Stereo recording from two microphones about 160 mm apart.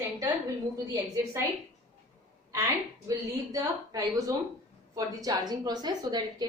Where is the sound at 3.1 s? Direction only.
20° right (ahead or behind).